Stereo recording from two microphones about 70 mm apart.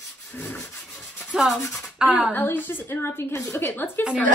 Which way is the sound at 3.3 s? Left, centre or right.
Left.